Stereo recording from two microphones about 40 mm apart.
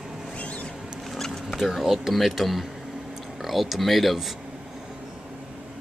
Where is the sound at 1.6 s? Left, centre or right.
Centre.